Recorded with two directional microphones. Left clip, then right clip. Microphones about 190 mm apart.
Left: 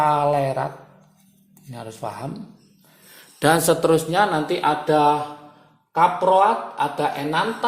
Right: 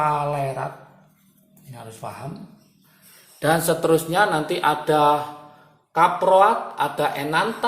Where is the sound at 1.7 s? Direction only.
50° left (ahead or behind).